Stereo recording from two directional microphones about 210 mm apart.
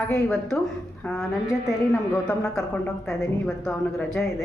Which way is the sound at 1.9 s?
15° left (ahead or behind).